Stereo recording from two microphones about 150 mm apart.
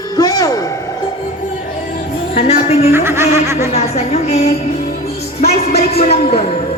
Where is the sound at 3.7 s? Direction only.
45° left (ahead or behind).